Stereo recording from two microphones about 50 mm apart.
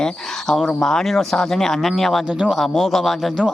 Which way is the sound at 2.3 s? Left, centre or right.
Centre.